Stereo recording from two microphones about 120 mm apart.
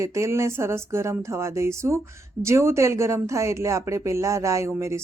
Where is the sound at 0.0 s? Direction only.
25° right (ahead or behind).